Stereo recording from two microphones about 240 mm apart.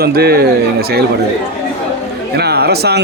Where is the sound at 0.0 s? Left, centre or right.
Right.